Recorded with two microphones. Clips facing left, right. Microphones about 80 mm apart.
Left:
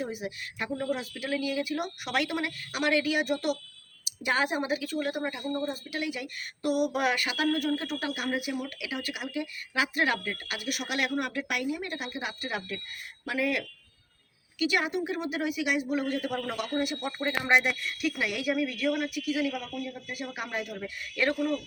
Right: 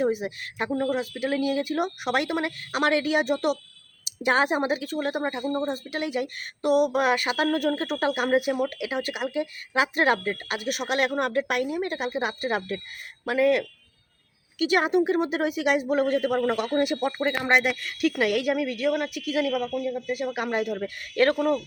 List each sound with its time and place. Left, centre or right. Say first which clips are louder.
0.1 s speech: right 8 dB; right
0.9 s a woman's voice: right 6 dB; right
1.3 s speech: right 3 dB; right
2.0 s a woman's voice: right 2 dB; right
5.5 s a woman's voice: right 5 dB; right
5.9 s speech: right 6 dB; right
6.8 s a woman's voice: right 5 dB; right
7.3 s speech: right 4 dB; right
10.9 s speech: right 6 dB; right
16.7 s speech: right 3 dB; right
17.5 s a woman's voice: even; right
20.1 s speech: right 4 dB; right
20.8 s a woman's voice: right 6 dB; right